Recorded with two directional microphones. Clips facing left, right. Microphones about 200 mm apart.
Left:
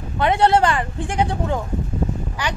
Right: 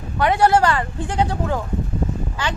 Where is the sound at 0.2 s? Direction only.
20° left (ahead or behind).